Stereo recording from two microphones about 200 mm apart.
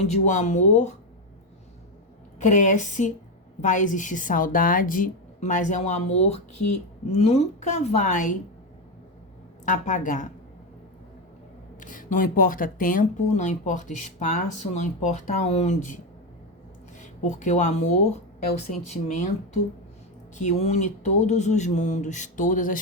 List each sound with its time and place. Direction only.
0.1 s speech: 40° left (ahead or behind)
2.4 s speech: 40° left (ahead or behind)
9.6 s speech: 40° left (ahead or behind)
11.8 s speech: 40° left (ahead or behind)
17.0 s speech: 35° left (ahead or behind)
20.3 s speech: 35° left (ahead or behind)